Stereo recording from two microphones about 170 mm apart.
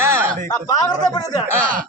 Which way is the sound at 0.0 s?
15° right (ahead or behind).